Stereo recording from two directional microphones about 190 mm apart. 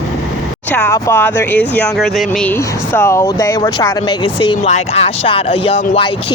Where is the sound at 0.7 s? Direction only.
10° left (ahead or behind).